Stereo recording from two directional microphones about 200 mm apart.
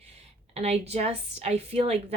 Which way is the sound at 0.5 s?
30° right (ahead or behind).